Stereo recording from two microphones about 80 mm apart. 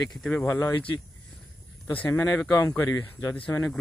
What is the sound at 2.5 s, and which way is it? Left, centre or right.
Speech, left.